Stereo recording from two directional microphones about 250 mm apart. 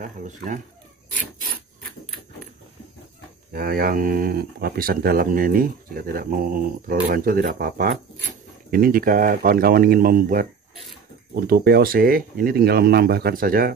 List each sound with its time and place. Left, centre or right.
3.5 s speech: right